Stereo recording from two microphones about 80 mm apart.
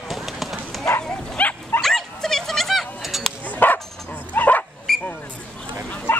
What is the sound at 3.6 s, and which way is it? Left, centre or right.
Bow-wow, left.